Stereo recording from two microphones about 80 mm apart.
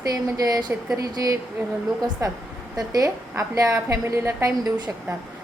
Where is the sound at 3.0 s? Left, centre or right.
Right.